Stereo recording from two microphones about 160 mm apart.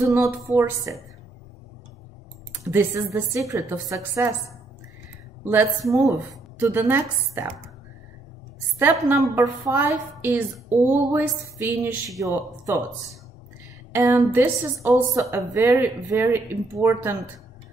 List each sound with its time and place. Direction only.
0.1 s a woman's voice: 20° right (ahead or behind)
2.6 s a woman's voice: 15° right (ahead or behind)
5.4 s a woman's voice: 15° right (ahead or behind)
9.1 s a woman's voice: 15° right (ahead or behind)